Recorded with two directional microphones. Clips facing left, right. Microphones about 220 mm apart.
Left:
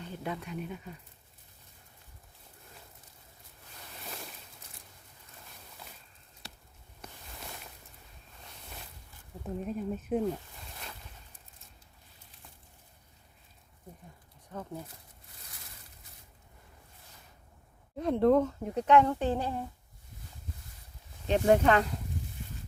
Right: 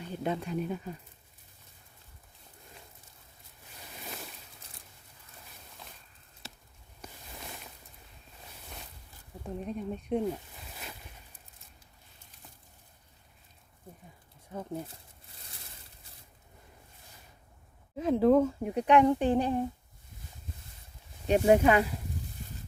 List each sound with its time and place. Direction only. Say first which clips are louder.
0.0 s speech: right 5 dB; 20° right (ahead or behind)
4.0 s a sound: right 1 dB; centre (ahead or behind)
9.4 s speech: left 1 dB; 5° left (ahead or behind)
14.5 s speech: right 3 dB; 15° right (ahead or behind)
17.9 s speech: right 1 dB; centre (ahead or behind)
21.2 s speech: right 2 dB; 10° right (ahead or behind)